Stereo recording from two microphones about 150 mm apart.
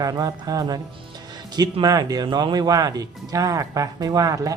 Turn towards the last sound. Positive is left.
turn(degrees=-25)  # may be behind; listen again after turning